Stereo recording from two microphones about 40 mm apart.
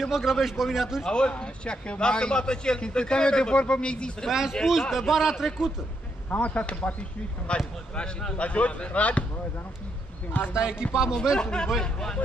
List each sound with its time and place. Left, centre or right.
0.1 s speech: centre
1.0 s a man's voice: left
4.3 s speech: centre
6.3 s a man's voice: left
10.5 s speech: right
11.3 s a man's voice: centre